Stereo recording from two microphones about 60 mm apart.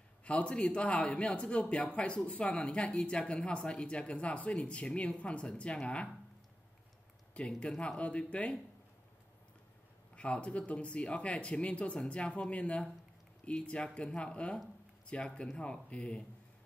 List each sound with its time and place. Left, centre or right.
0.2 s speech: left
7.3 s speech: centre
10.1 s speech: centre